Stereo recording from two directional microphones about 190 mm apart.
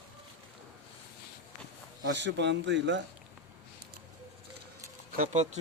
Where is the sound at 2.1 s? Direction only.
65° right (ahead or behind).